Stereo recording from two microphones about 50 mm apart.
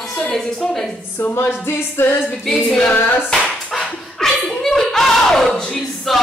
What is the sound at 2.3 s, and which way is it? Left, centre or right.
A capella, centre.